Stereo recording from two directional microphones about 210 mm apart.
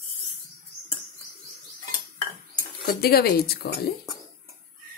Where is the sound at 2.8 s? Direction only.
50° left (ahead or behind).